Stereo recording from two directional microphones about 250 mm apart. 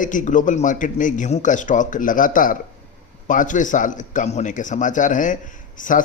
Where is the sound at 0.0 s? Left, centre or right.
Left.